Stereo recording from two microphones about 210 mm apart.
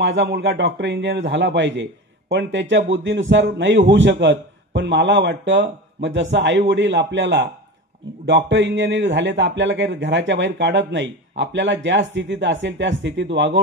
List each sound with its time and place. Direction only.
0.0 s a man's voice: 60° right (ahead or behind)